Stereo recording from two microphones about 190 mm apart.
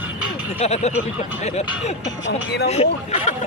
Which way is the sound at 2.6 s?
35° left (ahead or behind).